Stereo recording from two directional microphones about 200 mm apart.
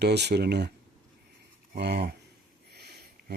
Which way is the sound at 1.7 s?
55° right (ahead or behind).